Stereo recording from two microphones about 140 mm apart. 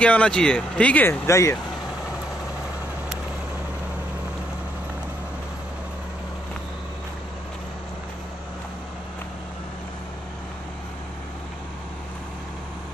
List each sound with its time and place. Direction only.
0.0 s speech: 10° left (ahead or behind)